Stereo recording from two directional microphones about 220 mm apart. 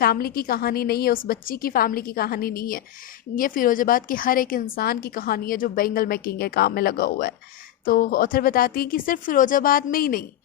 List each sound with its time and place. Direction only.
0.0 s a woman's voice: 45° left (ahead or behind)